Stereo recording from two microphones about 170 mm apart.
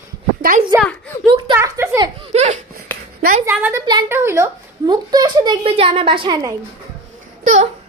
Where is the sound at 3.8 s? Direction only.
25° right (ahead or behind).